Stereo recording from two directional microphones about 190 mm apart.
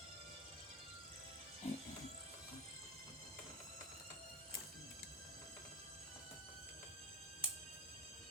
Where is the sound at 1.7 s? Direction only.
35° left (ahead or behind).